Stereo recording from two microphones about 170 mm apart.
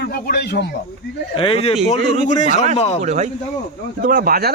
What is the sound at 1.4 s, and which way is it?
Speech, 35° left (ahead or behind).